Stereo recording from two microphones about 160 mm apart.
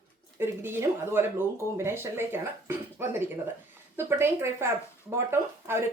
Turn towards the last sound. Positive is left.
turn(degrees=-15)  # may be behind; listen again after turning